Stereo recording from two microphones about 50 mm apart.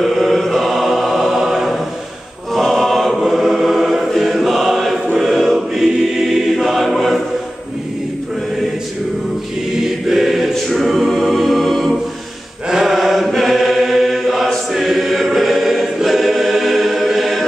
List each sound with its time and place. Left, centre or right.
0.0 s chant: centre
2.5 s choir: centre
10.0 s choir: centre
10.5 s a capella: centre
12.6 s mantra: centre
13.3 s chant: centre
14.7 s choir: centre